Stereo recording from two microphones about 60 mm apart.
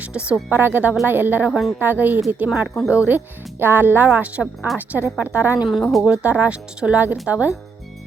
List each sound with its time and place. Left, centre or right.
0.0 s a woman's voice: centre
0.5 s a woman's voice: right
2.5 s speech: centre
3.1 s a woman's voice: right
5.8 s speech: centre
6.1 s a woman's voice: right